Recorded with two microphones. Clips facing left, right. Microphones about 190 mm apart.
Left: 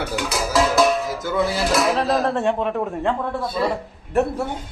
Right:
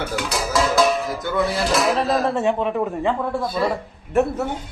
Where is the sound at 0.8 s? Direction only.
Centre (ahead or behind).